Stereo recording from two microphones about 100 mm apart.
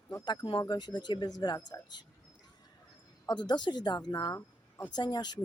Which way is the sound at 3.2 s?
45° left (ahead or behind).